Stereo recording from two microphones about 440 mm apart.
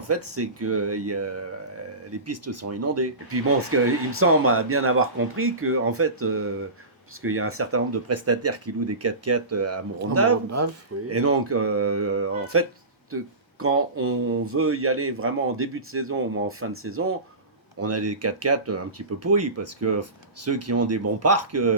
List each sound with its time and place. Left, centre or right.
0.1 s speech: right